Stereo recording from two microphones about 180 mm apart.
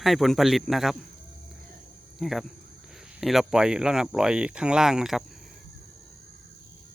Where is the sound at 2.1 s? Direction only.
Centre (ahead or behind).